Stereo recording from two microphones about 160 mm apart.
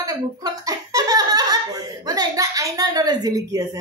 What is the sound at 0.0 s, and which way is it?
Giggle, 20° right (ahead or behind).